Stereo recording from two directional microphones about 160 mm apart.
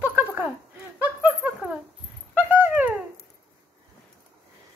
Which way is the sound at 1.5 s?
5° right (ahead or behind).